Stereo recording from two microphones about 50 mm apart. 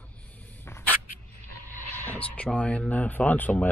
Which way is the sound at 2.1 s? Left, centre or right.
Left.